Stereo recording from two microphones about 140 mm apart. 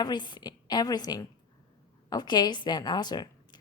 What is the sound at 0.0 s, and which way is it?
A woman's voice, 30° left (ahead or behind).